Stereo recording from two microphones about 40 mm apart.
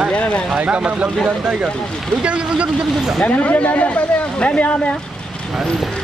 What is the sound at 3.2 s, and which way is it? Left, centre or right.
Speech, left.